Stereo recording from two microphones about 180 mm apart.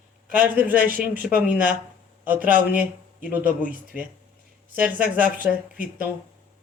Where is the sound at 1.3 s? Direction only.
5° right (ahead or behind).